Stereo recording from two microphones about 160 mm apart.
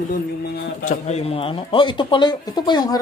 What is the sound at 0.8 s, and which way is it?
Speech, 45° left (ahead or behind).